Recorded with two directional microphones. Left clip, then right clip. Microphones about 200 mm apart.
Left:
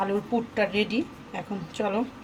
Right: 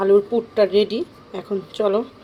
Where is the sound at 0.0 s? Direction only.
30° right (ahead or behind).